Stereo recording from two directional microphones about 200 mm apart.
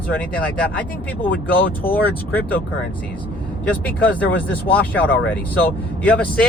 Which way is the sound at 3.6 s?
10° left (ahead or behind).